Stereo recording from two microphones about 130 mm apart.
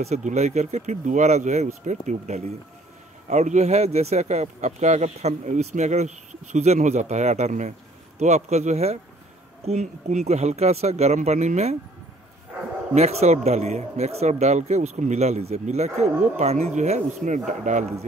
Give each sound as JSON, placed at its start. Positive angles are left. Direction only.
{"t": 0.0, "sound": "speech", "side_deg": -60}
{"t": 12.9, "sound": "speech", "side_deg": -55}